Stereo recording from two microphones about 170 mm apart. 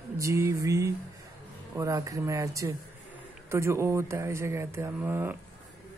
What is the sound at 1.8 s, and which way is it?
Speech, 20° right (ahead or behind).